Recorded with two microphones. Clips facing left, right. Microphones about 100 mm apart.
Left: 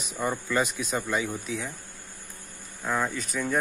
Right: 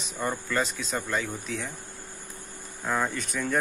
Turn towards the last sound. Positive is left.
turn(degrees=0)  # may be behind; listen again after turning